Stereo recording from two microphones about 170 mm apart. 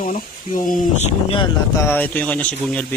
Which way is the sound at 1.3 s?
30° left (ahead or behind).